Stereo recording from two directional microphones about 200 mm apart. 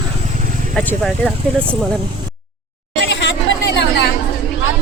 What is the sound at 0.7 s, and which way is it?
Speech, 5° left (ahead or behind).